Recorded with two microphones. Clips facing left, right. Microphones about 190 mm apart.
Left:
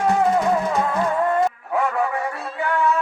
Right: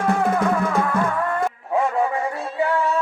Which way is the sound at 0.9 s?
20° left (ahead or behind).